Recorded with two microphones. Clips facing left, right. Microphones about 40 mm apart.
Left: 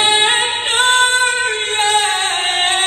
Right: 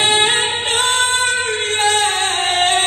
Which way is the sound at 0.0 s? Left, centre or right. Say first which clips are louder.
Left 1 dB; centre.